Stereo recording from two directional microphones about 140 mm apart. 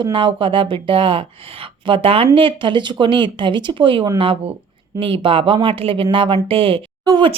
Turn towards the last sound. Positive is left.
turn(degrees=-25)  # may be behind; listen again after turning